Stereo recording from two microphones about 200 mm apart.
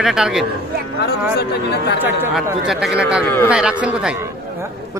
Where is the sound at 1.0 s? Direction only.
55° left (ahead or behind).